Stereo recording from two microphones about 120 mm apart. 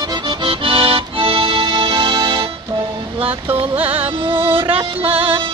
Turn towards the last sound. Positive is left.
turn(degrees=-50)  # may be behind; listen again after turning